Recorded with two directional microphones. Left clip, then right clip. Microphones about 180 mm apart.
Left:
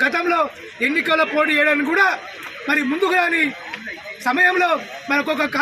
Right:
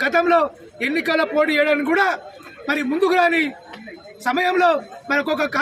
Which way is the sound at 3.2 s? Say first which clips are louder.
Right 1 dB; 30° right (ahead or behind).